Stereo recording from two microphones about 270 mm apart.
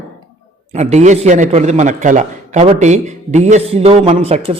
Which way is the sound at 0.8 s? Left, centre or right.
Right.